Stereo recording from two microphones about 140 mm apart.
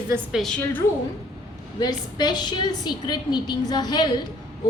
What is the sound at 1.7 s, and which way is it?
A woman's voice, 30° left (ahead or behind).